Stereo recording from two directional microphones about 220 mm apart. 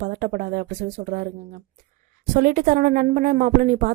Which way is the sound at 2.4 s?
40° right (ahead or behind).